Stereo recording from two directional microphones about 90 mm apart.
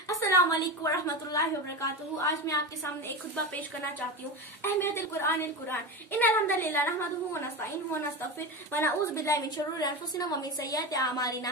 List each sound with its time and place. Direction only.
0.2 s a woman's voice: 35° left (ahead or behind)
4.6 s a woman's voice: 25° left (ahead or behind)
8.7 s a woman's voice: 30° left (ahead or behind)